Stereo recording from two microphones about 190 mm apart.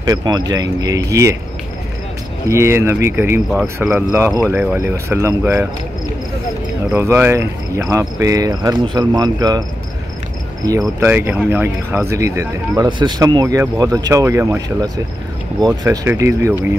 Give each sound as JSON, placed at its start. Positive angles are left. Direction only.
{"t": 0.0, "sound": "speech", "side_deg": -20}
{"t": 2.4, "sound": "speech", "side_deg": -15}
{"t": 6.9, "sound": "speech", "side_deg": -10}
{"t": 11.0, "sound": "speech", "side_deg": -10}